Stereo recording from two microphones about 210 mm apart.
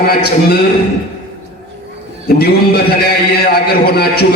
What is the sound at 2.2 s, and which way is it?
A man's voice, 45° left (ahead or behind).